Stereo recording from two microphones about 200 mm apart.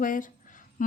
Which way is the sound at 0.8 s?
40° left (ahead or behind).